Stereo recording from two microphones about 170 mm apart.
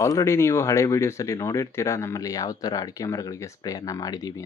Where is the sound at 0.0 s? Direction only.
20° left (ahead or behind).